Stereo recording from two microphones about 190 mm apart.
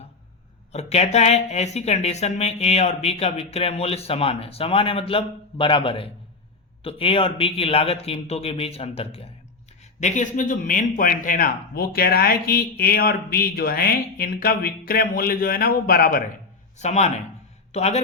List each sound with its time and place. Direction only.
0.7 s speech: 35° left (ahead or behind)
10.0 s speech: 40° left (ahead or behind)
16.7 s a man's voice: 35° left (ahead or behind)